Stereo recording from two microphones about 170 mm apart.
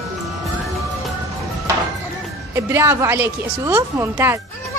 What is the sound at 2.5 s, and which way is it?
A woman's voice, 15° right (ahead or behind).